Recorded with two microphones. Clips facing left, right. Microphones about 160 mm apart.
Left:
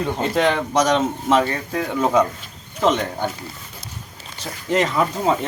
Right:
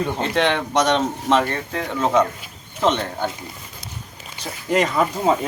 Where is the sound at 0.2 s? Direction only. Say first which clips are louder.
Left 2 dB; 5° left (ahead or behind).